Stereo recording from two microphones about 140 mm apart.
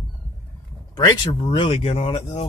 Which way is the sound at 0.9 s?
30° left (ahead or behind).